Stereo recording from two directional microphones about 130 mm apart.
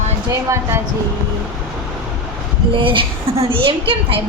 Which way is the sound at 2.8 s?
40° right (ahead or behind).